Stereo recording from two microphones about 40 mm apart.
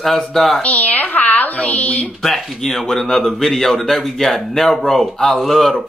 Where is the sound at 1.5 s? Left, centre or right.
Left.